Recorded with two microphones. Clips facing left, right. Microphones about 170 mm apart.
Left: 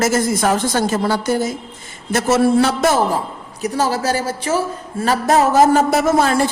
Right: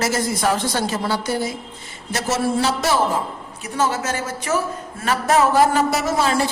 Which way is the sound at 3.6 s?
35° left (ahead or behind).